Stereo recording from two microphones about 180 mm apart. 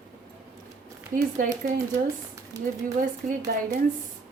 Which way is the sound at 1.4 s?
50° right (ahead or behind).